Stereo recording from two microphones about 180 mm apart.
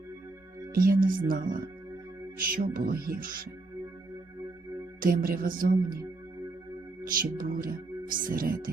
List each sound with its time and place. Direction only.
0.7 s speech: 55° right (ahead or behind)
4.9 s speech: 50° right (ahead or behind)
7.1 s speech: 50° right (ahead or behind)